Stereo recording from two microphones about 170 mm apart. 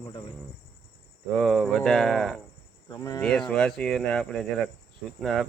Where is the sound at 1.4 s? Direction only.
Centre (ahead or behind).